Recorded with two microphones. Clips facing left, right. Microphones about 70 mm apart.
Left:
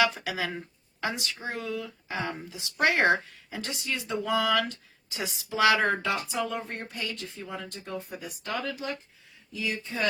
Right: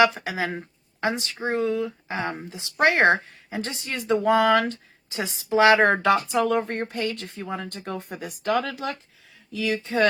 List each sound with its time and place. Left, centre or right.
0.3 s speech: right
4.2 s speech: right
5.8 s speech: right
6.9 s speech: right
7.8 s speech: right
9.5 s speech: right